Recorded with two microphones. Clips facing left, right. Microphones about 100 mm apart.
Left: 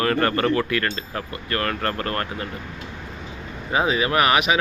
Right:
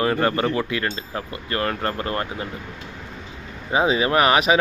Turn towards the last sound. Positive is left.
turn(degrees=-35)  # may be behind; listen again after turning